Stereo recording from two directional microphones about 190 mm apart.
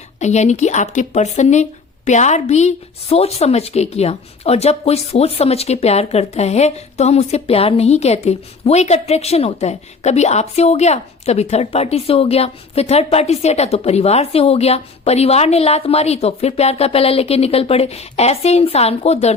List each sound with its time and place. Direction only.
0.2 s a woman's voice: 35° left (ahead or behind)